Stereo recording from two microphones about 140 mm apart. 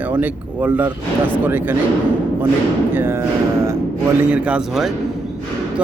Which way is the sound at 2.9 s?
15° right (ahead or behind).